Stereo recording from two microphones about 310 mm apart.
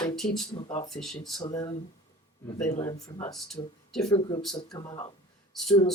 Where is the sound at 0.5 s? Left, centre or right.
Centre.